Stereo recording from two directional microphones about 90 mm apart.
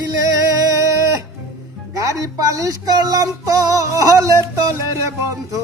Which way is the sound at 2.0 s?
40° right (ahead or behind).